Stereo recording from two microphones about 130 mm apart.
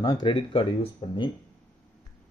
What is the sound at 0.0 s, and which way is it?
Speech, 35° left (ahead or behind).